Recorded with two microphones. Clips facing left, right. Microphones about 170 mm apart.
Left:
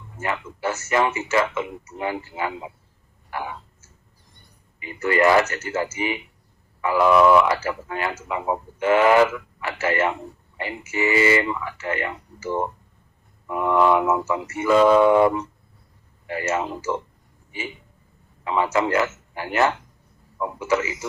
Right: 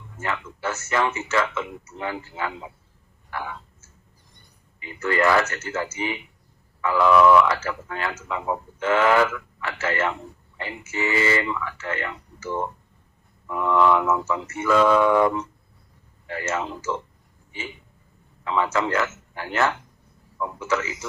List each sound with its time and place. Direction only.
0.2 s speech: 15° left (ahead or behind)
3.2 s a sound: 15° left (ahead or behind)
4.8 s speech: 15° left (ahead or behind)
14.7 s a sound: 25° left (ahead or behind)
16.2 s speech: 15° left (ahead or behind)
18.4 s speech: 15° left (ahead or behind)